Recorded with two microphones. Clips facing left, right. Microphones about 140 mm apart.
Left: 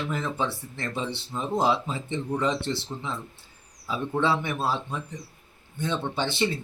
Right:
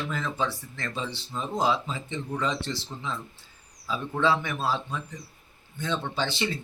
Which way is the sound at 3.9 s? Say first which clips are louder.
Even; 25° left (ahead or behind).